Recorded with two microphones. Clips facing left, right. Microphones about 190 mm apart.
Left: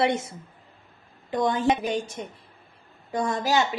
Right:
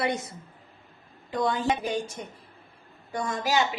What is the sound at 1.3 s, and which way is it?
Speech, 20° left (ahead or behind).